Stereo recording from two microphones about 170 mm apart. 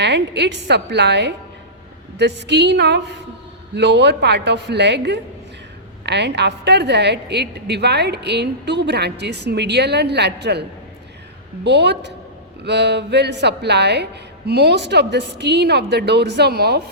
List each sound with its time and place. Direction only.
0.0 s a woman's voice: 85° right
3.8 s a woman's voice: 90° right; by 16.8 s 70° right (ahead or behind)